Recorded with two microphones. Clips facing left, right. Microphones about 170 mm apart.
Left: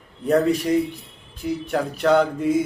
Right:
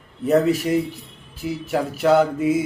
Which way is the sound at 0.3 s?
5° right (ahead or behind).